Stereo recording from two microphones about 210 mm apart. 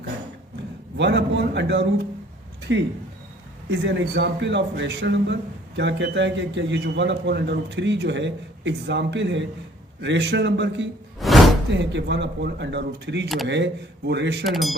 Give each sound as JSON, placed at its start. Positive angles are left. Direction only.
{"t": 0.9, "sound": "a man's voice", "side_deg": -55}
{"t": 11.2, "sound": "a sound", "side_deg": 0}
{"t": 11.7, "sound": "a man's voice", "side_deg": -55}
{"t": 13.2, "sound": "speech", "side_deg": 0}
{"t": 13.5, "sound": "a man's voice", "side_deg": -55}
{"t": 14.4, "sound": "speech", "side_deg": 0}